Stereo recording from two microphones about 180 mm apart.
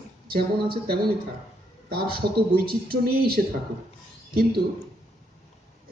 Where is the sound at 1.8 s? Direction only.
55° right (ahead or behind).